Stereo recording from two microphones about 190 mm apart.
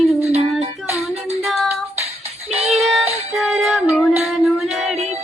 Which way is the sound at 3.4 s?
Centre (ahead or behind).